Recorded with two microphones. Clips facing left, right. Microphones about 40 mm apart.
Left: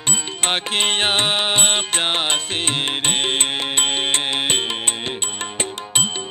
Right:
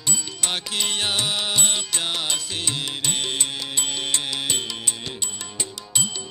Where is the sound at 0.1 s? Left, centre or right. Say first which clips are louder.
Left 6 dB; left.